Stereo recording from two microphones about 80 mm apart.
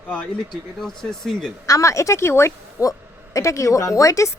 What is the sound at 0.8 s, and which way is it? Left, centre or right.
Speech, centre.